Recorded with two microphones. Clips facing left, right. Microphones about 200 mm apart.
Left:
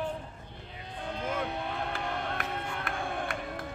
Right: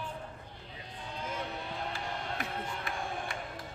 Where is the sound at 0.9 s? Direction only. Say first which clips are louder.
Left 6 dB; 55° left (ahead or behind).